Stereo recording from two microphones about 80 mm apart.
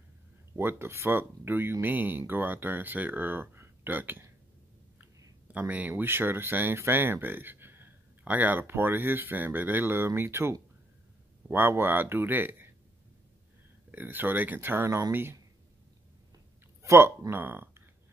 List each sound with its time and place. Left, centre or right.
0.6 s speech: right
5.5 s speech: centre
13.9 s speech: right
14.9 s speech: right
16.8 s speech: right